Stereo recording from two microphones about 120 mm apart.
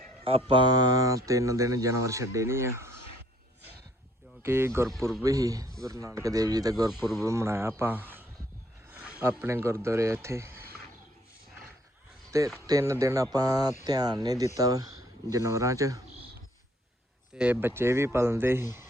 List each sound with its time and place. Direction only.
0.3 s mantra: 50° right (ahead or behind)
0.6 s speech: 35° right (ahead or behind)
4.4 s speech: 20° right (ahead or behind)
6.9 s speech: centre (ahead or behind)
7.3 s speech: 25° right (ahead or behind)
12.5 s speech: 25° right (ahead or behind)
17.3 s speech: 10° right (ahead or behind)